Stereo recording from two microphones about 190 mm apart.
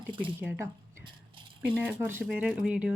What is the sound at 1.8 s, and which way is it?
A woman's voice, 10° right (ahead or behind).